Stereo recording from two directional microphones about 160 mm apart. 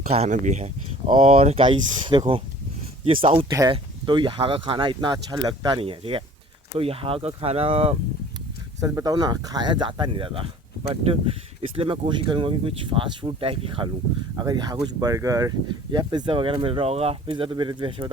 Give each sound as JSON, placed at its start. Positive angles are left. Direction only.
{"t": 0.1, "sound": "speech", "side_deg": -45}
{"t": 8.8, "sound": "speech", "side_deg": -20}
{"t": 11.8, "sound": "speech", "side_deg": -30}